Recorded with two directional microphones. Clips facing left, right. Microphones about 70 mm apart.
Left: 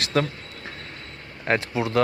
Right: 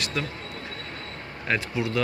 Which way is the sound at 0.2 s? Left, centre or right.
Left.